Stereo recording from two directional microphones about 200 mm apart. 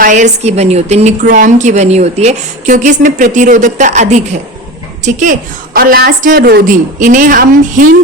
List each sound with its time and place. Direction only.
0.0 s a woman's voice: 35° right (ahead or behind)